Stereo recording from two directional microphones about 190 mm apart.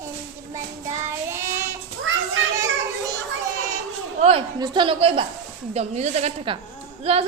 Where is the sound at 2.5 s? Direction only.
15° right (ahead or behind).